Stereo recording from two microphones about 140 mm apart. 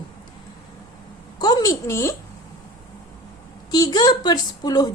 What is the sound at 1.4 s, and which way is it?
Speech, 30° left (ahead or behind).